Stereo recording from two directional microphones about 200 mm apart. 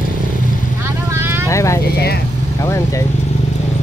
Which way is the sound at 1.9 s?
50° left (ahead or behind).